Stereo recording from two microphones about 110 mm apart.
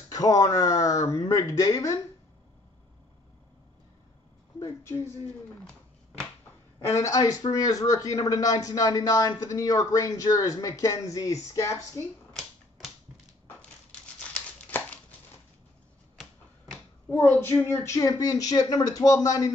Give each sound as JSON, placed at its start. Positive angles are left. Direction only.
{"t": 0.1, "sound": "a man's voice", "side_deg": 35}
{"t": 4.6, "sound": "a woman's voice", "side_deg": 25}
{"t": 6.9, "sound": "a man's voice", "side_deg": 30}
{"t": 14.3, "sound": "a sound", "side_deg": 15}
{"t": 17.6, "sound": "a man's voice", "side_deg": 25}